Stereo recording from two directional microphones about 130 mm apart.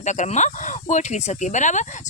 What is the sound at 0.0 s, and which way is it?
Speech, 65° left (ahead or behind).